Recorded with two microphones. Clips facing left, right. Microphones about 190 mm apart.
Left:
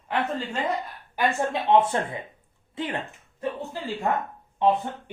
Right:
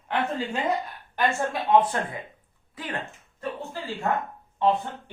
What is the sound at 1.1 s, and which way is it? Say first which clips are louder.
Speech: left 1 dB; 25° left (ahead or behind).